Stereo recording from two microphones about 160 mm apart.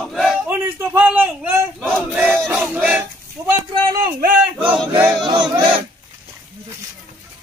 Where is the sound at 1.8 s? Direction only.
Centre (ahead or behind).